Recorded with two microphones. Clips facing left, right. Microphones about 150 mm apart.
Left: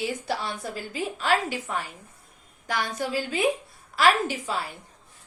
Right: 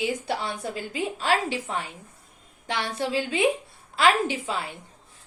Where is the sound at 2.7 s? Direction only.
30° right (ahead or behind).